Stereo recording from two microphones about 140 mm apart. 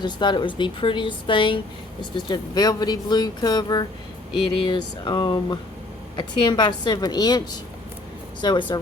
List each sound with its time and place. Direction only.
0.0 s speech: 35° left (ahead or behind)